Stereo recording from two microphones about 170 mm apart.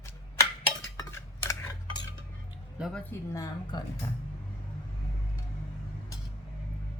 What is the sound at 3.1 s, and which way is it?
Speech, 20° left (ahead or behind).